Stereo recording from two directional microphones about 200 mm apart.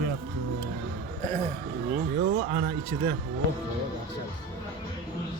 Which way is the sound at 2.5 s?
30° right (ahead or behind).